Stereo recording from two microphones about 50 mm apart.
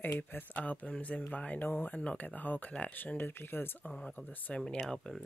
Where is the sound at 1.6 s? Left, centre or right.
Left.